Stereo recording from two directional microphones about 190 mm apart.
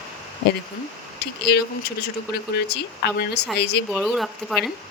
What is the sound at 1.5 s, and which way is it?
Speech, 60° left (ahead or behind).